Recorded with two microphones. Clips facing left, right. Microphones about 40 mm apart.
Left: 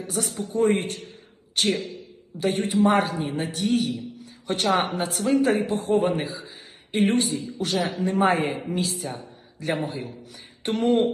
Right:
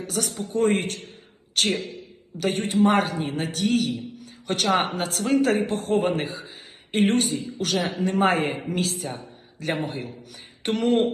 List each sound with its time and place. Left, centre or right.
0.0 s a man's voice: right
8.2 s a man's voice: right
8.7 s a man's voice: right